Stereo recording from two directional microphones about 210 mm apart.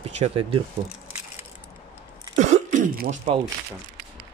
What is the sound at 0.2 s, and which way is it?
Speech, 25° right (ahead or behind).